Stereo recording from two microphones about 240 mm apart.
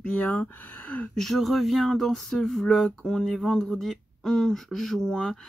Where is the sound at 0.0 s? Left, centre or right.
Centre.